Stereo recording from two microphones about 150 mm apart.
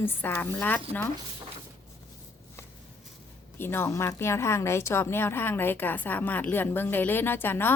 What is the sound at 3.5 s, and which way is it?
A woman's voice, 15° left (ahead or behind).